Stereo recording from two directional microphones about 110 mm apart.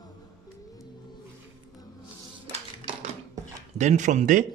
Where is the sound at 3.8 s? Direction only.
90° right.